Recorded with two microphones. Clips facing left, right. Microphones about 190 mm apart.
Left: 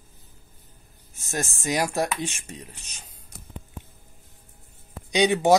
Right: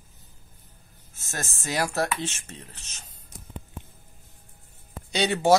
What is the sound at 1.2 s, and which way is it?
Speech, 15° left (ahead or behind).